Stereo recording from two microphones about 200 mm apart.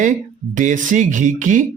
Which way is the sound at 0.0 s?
40° right (ahead or behind).